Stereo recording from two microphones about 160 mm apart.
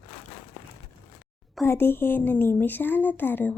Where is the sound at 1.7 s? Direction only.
15° left (ahead or behind).